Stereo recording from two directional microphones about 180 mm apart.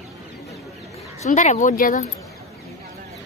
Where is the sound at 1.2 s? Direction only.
40° left (ahead or behind).